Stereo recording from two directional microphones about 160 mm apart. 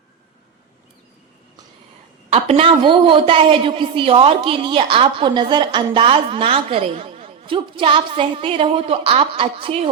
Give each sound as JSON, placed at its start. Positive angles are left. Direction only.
{"t": 2.3, "sound": "a woman's voice", "side_deg": -40}